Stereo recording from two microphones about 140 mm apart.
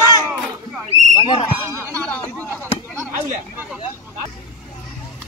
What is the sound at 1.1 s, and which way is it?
Speech, 35° left (ahead or behind).